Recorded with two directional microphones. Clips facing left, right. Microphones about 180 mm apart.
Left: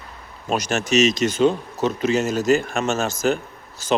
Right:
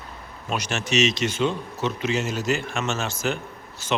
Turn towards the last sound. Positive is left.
turn(degrees=40)  # may be behind; listen again after turning